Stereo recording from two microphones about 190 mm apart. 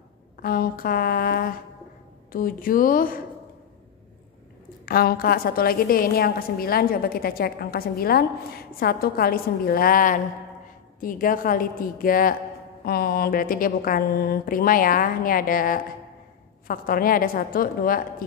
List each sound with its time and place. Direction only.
0.4 s a woman's voice: 50° left (ahead or behind)
4.8 s a woman's voice: 50° left (ahead or behind)